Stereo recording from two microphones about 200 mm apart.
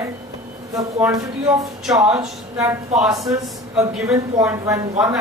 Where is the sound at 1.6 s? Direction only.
Centre (ahead or behind).